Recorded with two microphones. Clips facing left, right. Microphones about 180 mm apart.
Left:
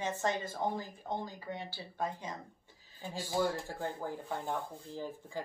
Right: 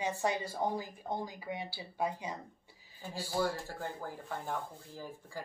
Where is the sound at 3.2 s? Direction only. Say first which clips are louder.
Left 1 dB; 15° left (ahead or behind).